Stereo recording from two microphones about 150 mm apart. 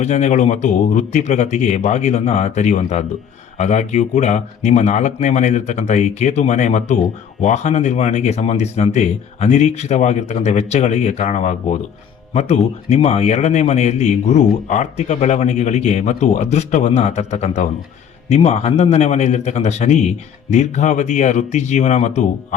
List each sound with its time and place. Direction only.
0.0 s speech: 50° left (ahead or behind)